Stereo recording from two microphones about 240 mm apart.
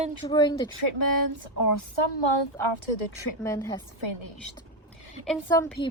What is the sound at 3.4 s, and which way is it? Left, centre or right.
Speech, centre.